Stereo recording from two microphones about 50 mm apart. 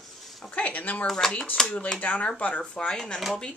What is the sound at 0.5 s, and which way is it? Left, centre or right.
Speech, left.